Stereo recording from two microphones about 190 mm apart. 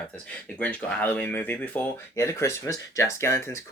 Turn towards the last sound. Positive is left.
turn(degrees=15)  # may be behind; listen again after turning